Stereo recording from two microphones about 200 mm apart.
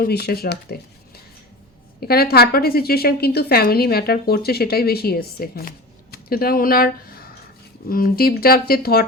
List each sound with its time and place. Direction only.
0.0 s a woman's voice: 50° left (ahead or behind)